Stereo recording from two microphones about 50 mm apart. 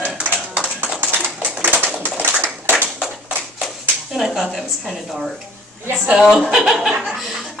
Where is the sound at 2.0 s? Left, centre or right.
Right.